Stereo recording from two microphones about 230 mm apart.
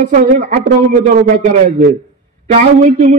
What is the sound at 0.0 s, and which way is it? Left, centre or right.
A man's voice, right.